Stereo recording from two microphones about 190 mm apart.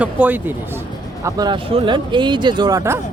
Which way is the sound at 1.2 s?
20° right (ahead or behind).